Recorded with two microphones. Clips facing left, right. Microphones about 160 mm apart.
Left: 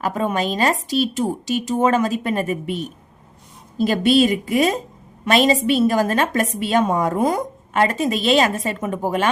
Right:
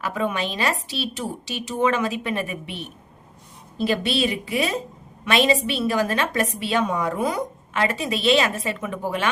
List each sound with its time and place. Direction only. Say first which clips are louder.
0.0 s a woman's voice: left 4 dB; 45° left (ahead or behind)